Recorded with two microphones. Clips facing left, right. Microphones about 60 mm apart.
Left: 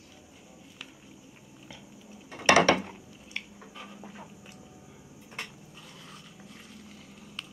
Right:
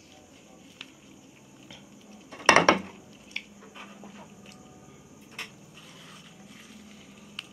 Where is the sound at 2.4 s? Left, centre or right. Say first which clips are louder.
Right 2 dB; right.